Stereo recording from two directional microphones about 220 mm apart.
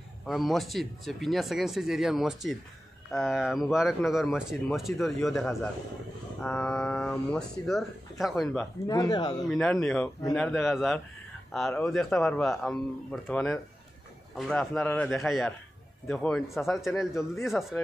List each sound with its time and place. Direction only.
0.3 s speech: centre (ahead or behind)
8.8 s speech: 15° left (ahead or behind)
9.5 s speech: 5° left (ahead or behind)